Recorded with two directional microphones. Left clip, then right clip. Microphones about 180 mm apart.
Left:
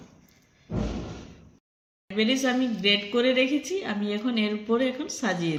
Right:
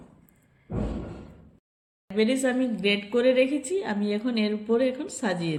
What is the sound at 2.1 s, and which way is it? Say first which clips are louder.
A woman's voice: even; 20° right (ahead or behind).